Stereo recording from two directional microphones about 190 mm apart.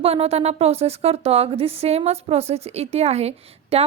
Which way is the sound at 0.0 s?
30° right (ahead or behind).